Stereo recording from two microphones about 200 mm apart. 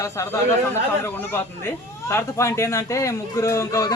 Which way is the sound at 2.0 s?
15° left (ahead or behind).